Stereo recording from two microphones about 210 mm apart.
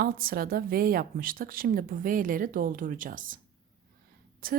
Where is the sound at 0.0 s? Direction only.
45° right (ahead or behind).